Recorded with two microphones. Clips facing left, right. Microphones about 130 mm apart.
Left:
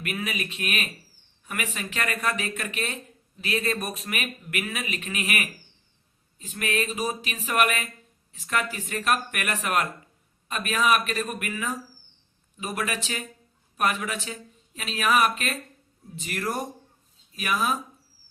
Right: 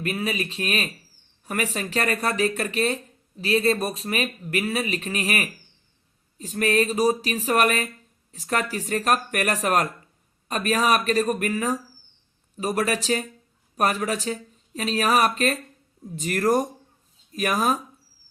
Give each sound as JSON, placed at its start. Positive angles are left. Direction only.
{"t": 0.0, "sound": "speech", "side_deg": -30}